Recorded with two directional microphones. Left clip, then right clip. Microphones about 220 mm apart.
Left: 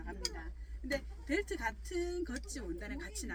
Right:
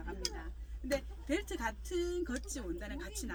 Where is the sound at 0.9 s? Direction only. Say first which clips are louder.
Right 2 dB; 5° right (ahead or behind).